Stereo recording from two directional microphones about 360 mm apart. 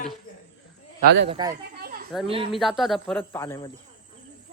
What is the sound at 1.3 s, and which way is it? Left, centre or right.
Speech, centre.